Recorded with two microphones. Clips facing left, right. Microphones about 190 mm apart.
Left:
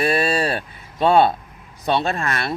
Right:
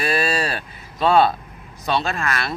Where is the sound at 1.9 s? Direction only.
25° left (ahead or behind).